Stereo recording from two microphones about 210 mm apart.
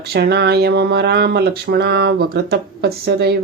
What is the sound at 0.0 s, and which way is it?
Speech, 50° right (ahead or behind).